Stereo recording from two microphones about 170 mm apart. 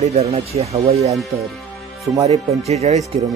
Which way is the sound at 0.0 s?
40° right (ahead or behind).